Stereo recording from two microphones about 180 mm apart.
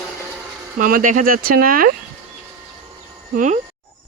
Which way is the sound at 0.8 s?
50° right (ahead or behind).